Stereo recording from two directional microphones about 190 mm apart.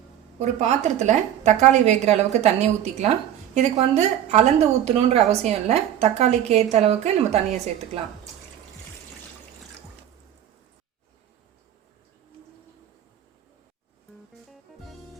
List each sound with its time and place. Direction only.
0.3 s a woman's voice: 35° right (ahead or behind)